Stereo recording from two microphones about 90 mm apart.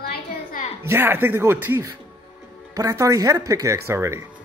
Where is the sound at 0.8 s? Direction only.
25° right (ahead or behind).